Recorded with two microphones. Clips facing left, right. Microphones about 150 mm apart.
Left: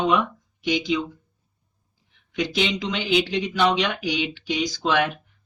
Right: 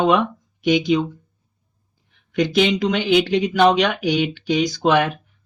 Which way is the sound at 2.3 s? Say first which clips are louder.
Right 7 dB; 50° right (ahead or behind).